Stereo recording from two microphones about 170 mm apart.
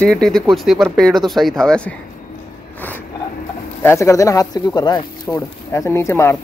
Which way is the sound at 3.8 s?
15° left (ahead or behind).